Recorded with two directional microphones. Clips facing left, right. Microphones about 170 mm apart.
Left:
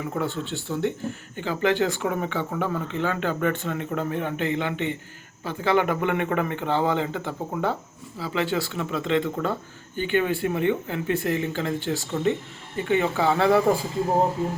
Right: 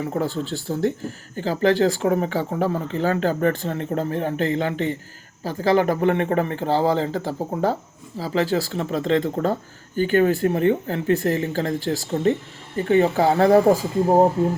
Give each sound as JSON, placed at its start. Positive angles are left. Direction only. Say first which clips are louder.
{"t": 0.0, "sound": "speech", "louder": "right 4 dB", "side_deg": -35}